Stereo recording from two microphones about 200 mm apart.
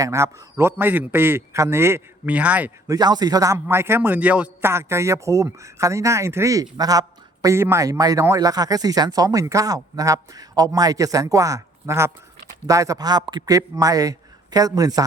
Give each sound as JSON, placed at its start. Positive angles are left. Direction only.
{"t": 0.0, "sound": "a man's voice", "side_deg": -15}